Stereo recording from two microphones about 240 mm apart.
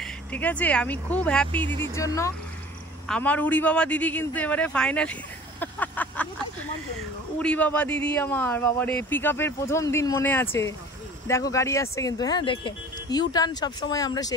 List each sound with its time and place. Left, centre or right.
0.0 s a man's voice: centre